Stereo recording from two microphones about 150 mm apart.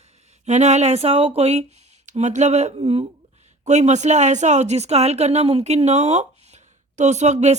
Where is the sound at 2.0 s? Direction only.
55° right (ahead or behind).